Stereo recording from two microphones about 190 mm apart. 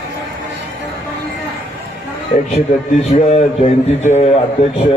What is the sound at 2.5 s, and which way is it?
A man's voice, 35° left (ahead or behind).